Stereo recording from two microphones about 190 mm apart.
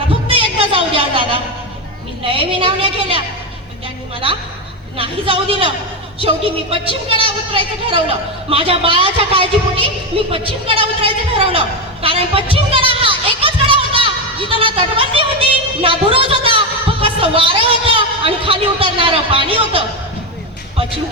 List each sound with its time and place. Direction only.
0.3 s a sound: 30° right (ahead or behind)
2.2 s a woman's voice: 30° right (ahead or behind)
4.9 s a woman's voice: 30° right (ahead or behind)